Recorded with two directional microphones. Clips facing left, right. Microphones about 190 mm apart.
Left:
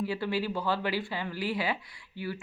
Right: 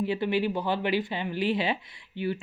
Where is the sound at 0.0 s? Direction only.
20° right (ahead or behind).